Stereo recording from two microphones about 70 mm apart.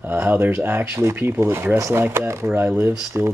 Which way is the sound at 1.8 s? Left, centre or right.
Right.